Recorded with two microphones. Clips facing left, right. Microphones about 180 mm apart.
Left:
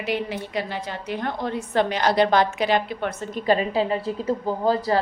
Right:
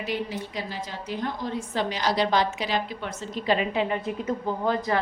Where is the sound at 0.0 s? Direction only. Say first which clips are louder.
Left 3 dB; 70° left (ahead or behind).